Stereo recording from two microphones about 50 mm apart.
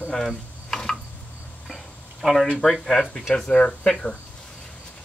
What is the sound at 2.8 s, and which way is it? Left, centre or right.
Speech, centre.